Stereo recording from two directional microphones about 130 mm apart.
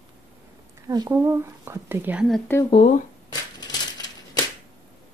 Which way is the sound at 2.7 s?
55° left (ahead or behind).